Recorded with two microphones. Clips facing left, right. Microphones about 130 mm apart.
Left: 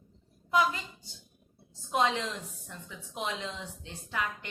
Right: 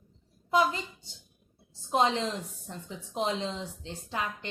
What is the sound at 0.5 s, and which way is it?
A woman's voice, 30° right (ahead or behind).